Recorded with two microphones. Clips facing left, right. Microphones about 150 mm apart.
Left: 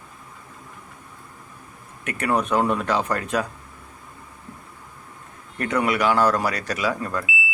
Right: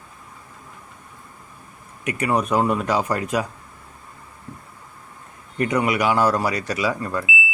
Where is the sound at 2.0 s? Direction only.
10° right (ahead or behind).